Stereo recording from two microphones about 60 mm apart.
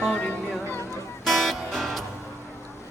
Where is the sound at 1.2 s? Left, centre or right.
Centre.